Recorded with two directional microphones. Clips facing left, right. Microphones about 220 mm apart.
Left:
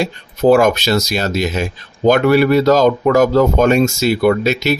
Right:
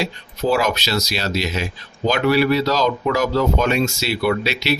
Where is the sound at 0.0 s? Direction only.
50° left (ahead or behind).